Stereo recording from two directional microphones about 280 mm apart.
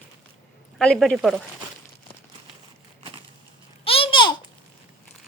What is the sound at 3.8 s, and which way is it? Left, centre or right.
Babbling, centre.